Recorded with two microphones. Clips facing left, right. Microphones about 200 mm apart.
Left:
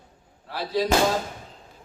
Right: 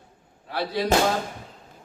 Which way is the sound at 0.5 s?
65° right (ahead or behind).